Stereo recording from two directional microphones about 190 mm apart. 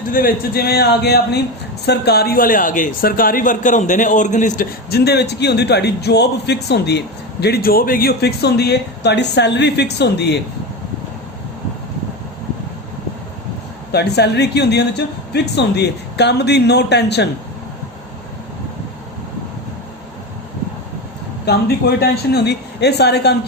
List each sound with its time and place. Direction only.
0.1 s a woman's voice: 50° left (ahead or behind)
4.9 s a woman's voice: 60° left (ahead or behind)
13.9 s a woman's voice: 60° left (ahead or behind)
21.4 s a woman's voice: 55° left (ahead or behind)